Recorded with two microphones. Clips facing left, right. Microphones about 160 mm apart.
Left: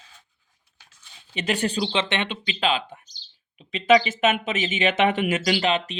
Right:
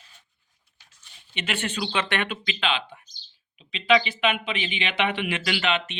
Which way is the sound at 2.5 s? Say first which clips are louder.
Left 3 dB; 35° left (ahead or behind).